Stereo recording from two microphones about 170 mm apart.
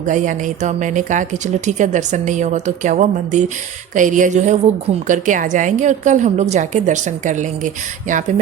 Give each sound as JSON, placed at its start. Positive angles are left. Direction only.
{"t": 0.0, "sound": "speech", "side_deg": -50}